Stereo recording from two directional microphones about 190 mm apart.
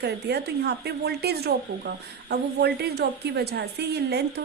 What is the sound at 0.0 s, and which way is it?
A woman's voice, 60° right (ahead or behind).